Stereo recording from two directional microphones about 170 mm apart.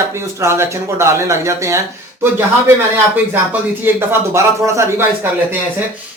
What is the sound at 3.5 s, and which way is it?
Speech, 15° right (ahead or behind).